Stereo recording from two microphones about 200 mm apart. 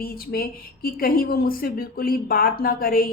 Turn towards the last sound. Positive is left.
turn(degrees=45)  # may be behind; listen again after turning